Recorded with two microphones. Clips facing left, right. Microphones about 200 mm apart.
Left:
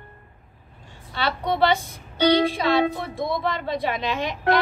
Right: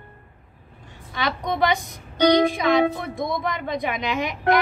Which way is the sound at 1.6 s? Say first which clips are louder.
Left 1 dB; 15° right (ahead or behind).